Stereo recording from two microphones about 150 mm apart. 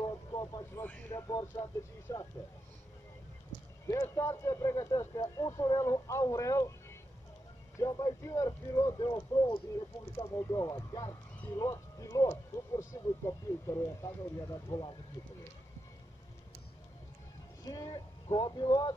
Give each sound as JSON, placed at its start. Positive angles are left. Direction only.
{"t": 0.0, "sound": "vehicle", "side_deg": 25}
{"t": 0.8, "sound": "speech", "side_deg": 10}
{"t": 1.3, "sound": "speech", "side_deg": 20}
{"t": 3.8, "sound": "speech", "side_deg": 20}
{"t": 7.8, "sound": "speech", "side_deg": 25}
{"t": 17.6, "sound": "speech", "side_deg": 25}